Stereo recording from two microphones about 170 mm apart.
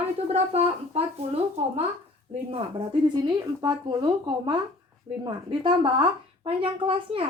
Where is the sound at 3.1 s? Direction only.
25° right (ahead or behind).